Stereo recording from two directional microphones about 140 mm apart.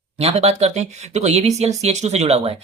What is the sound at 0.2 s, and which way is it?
Speech, 45° right (ahead or behind).